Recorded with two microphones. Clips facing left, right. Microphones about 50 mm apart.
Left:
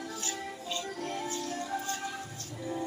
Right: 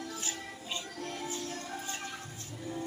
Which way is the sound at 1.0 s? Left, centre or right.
Centre.